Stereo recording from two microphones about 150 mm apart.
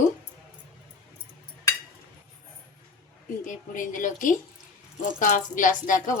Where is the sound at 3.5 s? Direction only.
60° left (ahead or behind).